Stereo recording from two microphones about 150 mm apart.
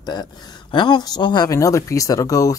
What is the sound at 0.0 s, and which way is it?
Speech, 30° left (ahead or behind).